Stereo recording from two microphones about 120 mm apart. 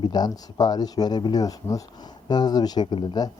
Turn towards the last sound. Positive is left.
turn(degrees=40)  # may be behind; listen again after turning